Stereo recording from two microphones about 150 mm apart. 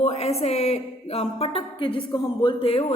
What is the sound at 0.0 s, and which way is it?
Speech, 45° left (ahead or behind).